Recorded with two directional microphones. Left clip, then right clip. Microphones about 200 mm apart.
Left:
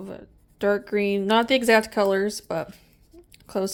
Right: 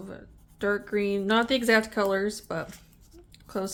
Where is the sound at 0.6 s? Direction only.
25° left (ahead or behind).